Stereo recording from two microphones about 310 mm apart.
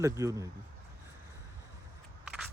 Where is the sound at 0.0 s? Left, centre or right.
Centre.